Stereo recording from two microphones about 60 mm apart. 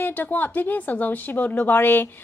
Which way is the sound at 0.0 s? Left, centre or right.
Left.